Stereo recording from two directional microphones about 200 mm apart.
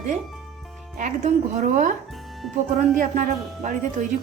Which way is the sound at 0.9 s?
40° right (ahead or behind).